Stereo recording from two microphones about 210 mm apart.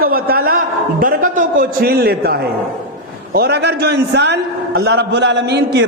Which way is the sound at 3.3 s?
50° right (ahead or behind).